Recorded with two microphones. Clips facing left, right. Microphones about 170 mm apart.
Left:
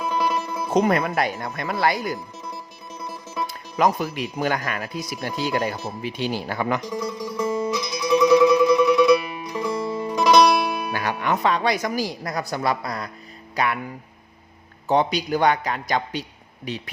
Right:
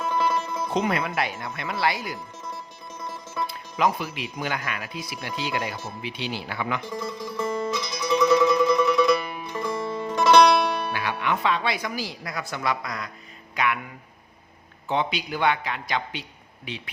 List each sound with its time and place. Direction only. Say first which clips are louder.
0.0 s music: left 1 dB; 15° left (ahead or behind)
0.7 s speech: left 6 dB; 45° left (ahead or behind)
3.0 s music: left 2 dB; 10° left (ahead or behind)
3.4 s speech: left 3 dB; 45° left (ahead or behind)
6.9 s speech: left 4 dB; 10° left (ahead or behind)
7.3 s music: left 3 dB; 10° left (ahead or behind)
10.9 s speech: left 3 dB; 40° left (ahead or behind)
14.8 s speech: left 6 dB; 40° left (ahead or behind)